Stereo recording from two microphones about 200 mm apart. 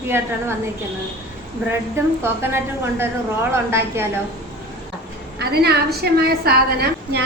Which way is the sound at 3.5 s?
10° right (ahead or behind).